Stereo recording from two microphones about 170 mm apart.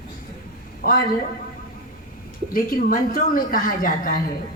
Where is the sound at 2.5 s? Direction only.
55° left (ahead or behind).